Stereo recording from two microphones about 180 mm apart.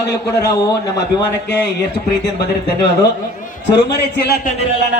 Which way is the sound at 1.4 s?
70° left (ahead or behind).